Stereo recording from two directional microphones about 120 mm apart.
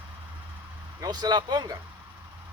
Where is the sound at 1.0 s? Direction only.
35° right (ahead or behind).